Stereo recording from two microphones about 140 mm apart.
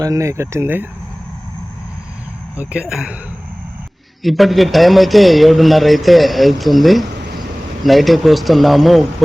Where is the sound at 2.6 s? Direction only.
5° right (ahead or behind).